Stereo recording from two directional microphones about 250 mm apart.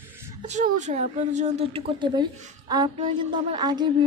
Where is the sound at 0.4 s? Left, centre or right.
Right.